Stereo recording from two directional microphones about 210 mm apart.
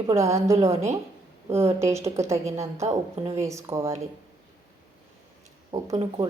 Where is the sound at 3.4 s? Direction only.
15° right (ahead or behind).